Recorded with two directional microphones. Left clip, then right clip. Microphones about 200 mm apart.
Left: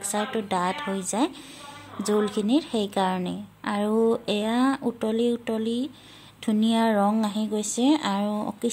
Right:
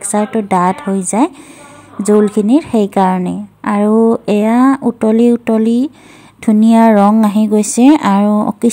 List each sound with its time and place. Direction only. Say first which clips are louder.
0.1 s a woman's voice: right 13 dB; 25° right (ahead or behind)